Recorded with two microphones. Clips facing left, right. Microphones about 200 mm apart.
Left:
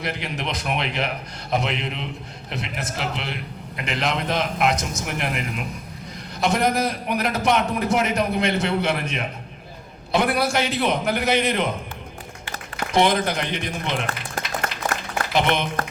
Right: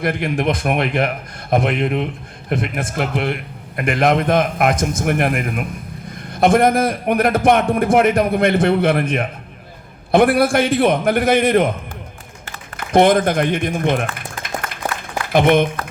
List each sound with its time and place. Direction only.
0.0 s a man's voice: 50° right (ahead or behind)
15.3 s a man's voice: 50° right (ahead or behind)